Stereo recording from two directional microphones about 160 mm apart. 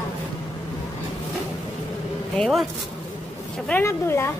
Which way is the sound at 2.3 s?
5° left (ahead or behind).